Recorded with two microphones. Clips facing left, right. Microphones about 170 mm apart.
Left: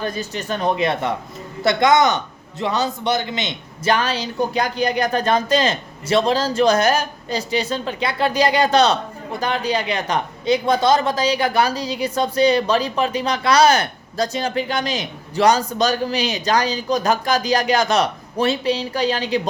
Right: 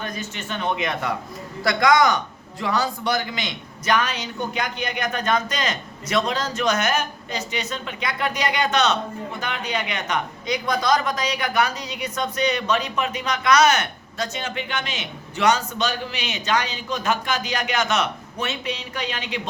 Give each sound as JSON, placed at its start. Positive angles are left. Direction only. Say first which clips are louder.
{"t": 0.0, "sound": "a man's voice", "louder": "left 6 dB", "side_deg": 35}